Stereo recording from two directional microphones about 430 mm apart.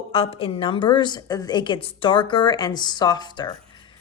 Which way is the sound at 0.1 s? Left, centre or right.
Centre.